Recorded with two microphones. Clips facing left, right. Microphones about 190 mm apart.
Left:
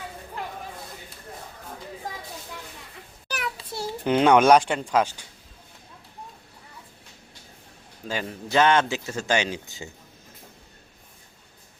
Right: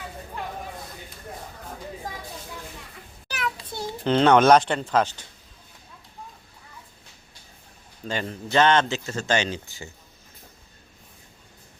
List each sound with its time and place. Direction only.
3.4 s a sound: 30° left (ahead or behind)
4.0 s speech: 10° left (ahead or behind)
8.0 s speech: 5° left (ahead or behind)